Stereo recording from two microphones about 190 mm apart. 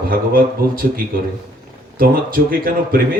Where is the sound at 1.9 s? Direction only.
50° right (ahead or behind).